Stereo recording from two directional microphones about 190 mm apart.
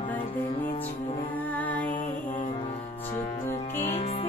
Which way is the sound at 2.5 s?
30° left (ahead or behind).